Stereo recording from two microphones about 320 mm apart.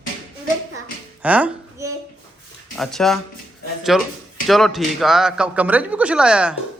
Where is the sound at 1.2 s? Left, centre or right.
Centre.